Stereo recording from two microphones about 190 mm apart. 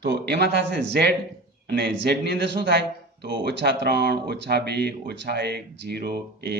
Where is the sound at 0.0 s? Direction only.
60° right (ahead or behind).